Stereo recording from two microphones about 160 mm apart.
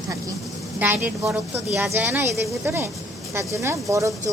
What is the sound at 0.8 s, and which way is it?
A woman's voice, 10° right (ahead or behind).